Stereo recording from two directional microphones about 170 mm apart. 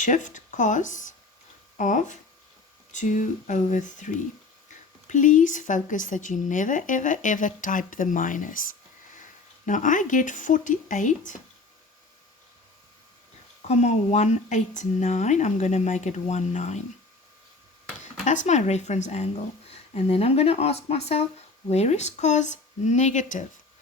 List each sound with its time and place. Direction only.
0.0 s speech: 45° left (ahead or behind)
9.6 s speech: 50° left (ahead or behind)
13.6 s speech: 40° left (ahead or behind)
18.0 s speech: 45° left (ahead or behind)